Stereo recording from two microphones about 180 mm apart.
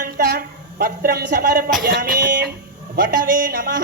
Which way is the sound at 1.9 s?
60° right (ahead or behind).